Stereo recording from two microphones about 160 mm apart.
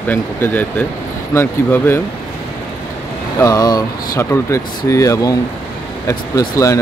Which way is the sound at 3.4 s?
20° left (ahead or behind).